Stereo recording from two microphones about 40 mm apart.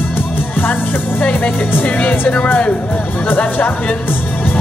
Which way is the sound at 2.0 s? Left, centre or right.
Left.